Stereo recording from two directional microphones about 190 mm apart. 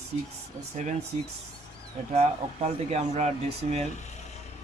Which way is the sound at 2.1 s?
35° right (ahead or behind).